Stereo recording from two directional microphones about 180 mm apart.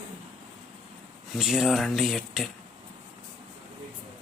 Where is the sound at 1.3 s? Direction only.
Centre (ahead or behind).